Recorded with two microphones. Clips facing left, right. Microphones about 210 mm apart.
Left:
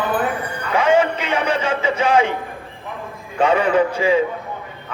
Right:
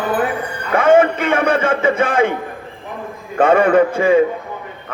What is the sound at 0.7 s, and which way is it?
Speech, 50° right (ahead or behind).